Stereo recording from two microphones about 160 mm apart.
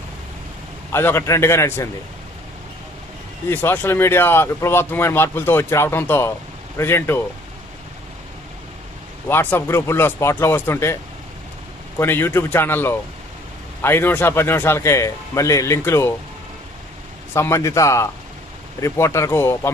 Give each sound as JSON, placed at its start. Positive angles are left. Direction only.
{"t": 0.9, "sound": "speech", "side_deg": 15}
{"t": 3.5, "sound": "speech", "side_deg": 15}
{"t": 9.3, "sound": "speech", "side_deg": 15}
{"t": 11.9, "sound": "speech", "side_deg": 15}
{"t": 17.3, "sound": "speech", "side_deg": 15}